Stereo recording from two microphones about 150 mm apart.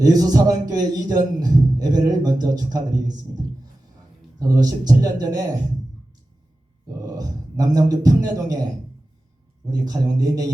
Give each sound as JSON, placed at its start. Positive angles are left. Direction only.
{"t": 0.0, "sound": "a man's voice", "side_deg": -25}
{"t": 4.4, "sound": "a man's voice", "side_deg": -25}
{"t": 6.8, "sound": "a man's voice", "side_deg": -25}